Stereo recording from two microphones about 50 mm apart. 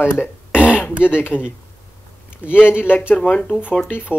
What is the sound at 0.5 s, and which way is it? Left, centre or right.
Throat clearing, right.